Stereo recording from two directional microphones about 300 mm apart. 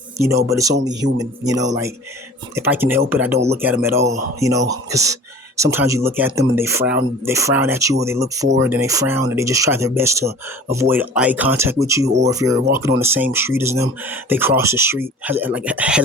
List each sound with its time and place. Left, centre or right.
0.2 s speech: centre
2.6 s speech: centre